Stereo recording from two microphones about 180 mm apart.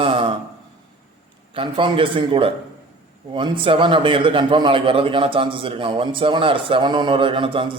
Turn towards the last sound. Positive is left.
turn(degrees=-30)  # may be behind; listen again after turning